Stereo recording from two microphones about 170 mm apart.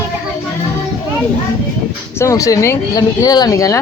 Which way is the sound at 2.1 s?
20° left (ahead or behind).